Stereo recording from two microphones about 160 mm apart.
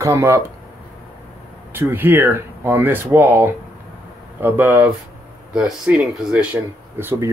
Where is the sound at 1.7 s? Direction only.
15° right (ahead or behind).